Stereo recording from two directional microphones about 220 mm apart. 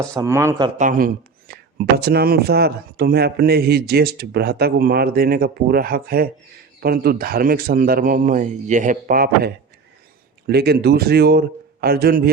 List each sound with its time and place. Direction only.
0.0 s a man's voice: 15° right (ahead or behind)
0.8 s a man's voice: 40° right (ahead or behind)